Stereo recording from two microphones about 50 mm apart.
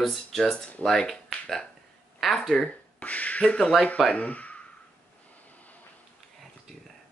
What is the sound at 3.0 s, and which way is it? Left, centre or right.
Speech, left.